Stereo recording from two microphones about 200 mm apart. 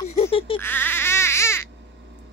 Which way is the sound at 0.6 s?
10° left (ahead or behind).